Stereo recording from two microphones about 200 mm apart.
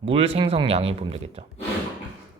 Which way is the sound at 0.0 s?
30° right (ahead or behind).